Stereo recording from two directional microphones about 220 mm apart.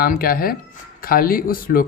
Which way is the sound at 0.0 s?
40° left (ahead or behind).